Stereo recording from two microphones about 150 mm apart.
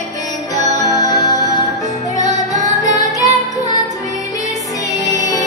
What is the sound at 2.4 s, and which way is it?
Music, 50° right (ahead or behind).